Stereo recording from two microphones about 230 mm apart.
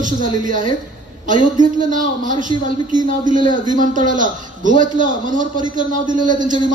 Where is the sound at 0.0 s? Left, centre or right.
Right.